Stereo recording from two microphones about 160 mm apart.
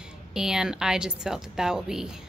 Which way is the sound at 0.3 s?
5° right (ahead or behind).